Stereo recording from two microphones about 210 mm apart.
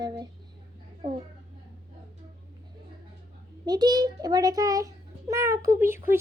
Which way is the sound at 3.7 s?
20° right (ahead or behind).